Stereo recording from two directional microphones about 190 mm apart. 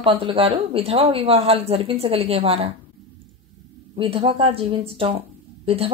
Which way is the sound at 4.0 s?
30° right (ahead or behind).